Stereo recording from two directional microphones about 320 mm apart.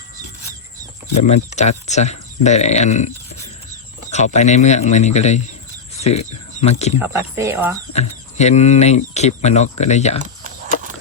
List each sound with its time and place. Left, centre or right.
1.1 s speech: left
7.0 s speech: centre
7.9 s speech: left